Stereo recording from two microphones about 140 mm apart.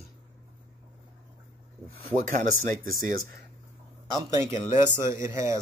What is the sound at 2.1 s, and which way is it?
Speech, 65° right (ahead or behind).